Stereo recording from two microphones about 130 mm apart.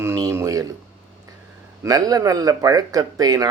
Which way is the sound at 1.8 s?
30° right (ahead or behind).